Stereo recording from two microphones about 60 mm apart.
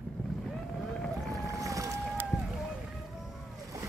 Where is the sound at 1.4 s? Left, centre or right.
Right.